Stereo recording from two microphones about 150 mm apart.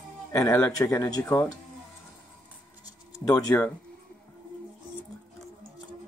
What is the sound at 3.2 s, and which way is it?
Speech, 20° left (ahead or behind).